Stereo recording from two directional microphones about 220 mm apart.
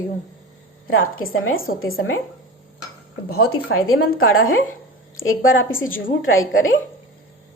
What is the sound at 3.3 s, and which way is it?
A woman's voice, 75° left (ahead or behind).